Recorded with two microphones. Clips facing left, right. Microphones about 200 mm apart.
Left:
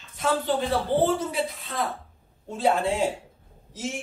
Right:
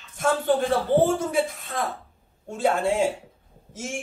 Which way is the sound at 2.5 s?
50° right (ahead or behind).